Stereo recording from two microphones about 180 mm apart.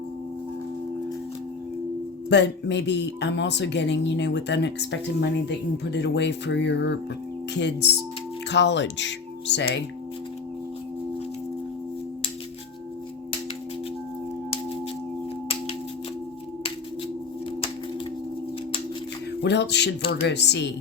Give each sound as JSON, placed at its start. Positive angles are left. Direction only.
{"t": 2.3, "sound": "speech", "side_deg": 75}
{"t": 19.4, "sound": "speech", "side_deg": 70}